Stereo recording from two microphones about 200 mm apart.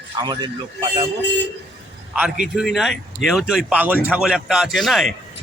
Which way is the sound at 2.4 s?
Centre (ahead or behind).